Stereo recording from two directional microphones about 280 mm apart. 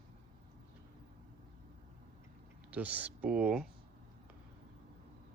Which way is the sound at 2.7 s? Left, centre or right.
Centre.